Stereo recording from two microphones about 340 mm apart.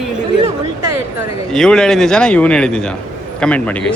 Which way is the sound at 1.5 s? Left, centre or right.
Centre.